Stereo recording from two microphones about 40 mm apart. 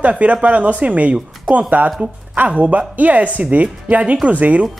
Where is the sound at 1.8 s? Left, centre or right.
Right.